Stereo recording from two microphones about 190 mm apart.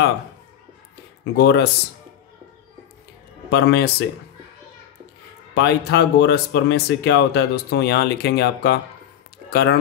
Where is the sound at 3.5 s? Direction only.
60° left (ahead or behind).